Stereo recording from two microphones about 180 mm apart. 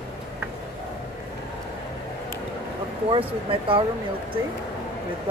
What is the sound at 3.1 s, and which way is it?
Speech, 30° right (ahead or behind).